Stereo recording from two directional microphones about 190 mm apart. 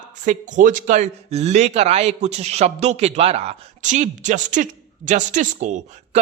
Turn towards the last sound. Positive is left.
turn(degrees=-40)  # may be behind; listen again after turning